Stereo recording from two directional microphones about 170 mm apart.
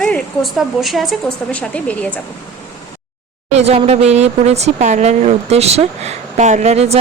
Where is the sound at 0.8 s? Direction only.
Centre (ahead or behind).